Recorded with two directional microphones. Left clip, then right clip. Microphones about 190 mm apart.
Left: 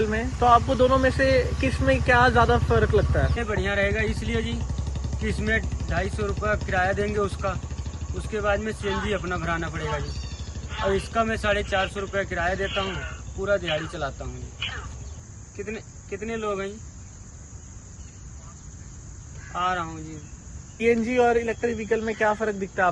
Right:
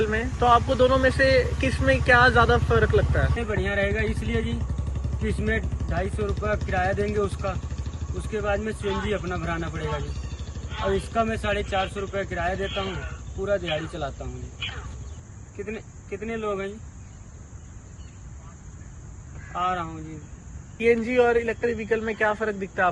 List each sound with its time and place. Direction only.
0.0 s vehicle: 45° left (ahead or behind)
0.4 s speech: 45° left (ahead or behind)
3.3 s speech: 5° left (ahead or behind)
19.5 s speech: centre (ahead or behind)
20.7 s speech: 50° left (ahead or behind)